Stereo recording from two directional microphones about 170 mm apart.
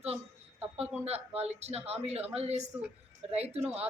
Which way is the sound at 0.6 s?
10° right (ahead or behind).